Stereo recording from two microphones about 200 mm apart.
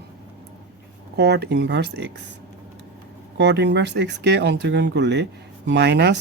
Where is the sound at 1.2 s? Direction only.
55° right (ahead or behind).